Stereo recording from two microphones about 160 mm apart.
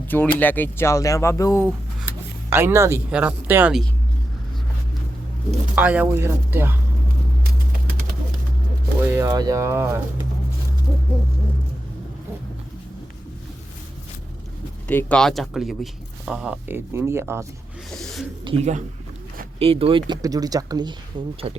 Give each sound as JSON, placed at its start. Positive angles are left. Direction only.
{"t": 0.1, "sound": "speech", "side_deg": 10}
{"t": 2.5, "sound": "speech", "side_deg": -15}
{"t": 5.7, "sound": "speech", "side_deg": -10}
{"t": 9.0, "sound": "music", "side_deg": -10}
{"t": 9.2, "sound": "speech", "side_deg": -25}
{"t": 14.8, "sound": "speech", "side_deg": 10}
{"t": 17.9, "sound": "speech", "side_deg": 0}
{"t": 18.4, "sound": "speech", "side_deg": -45}
{"t": 20.2, "sound": "speech", "side_deg": -25}